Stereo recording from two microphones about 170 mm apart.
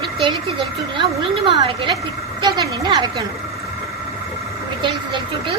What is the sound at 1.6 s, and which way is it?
Speech, 30° right (ahead or behind).